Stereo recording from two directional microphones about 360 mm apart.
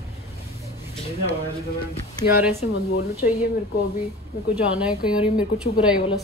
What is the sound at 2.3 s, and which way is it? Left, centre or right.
Speech, centre.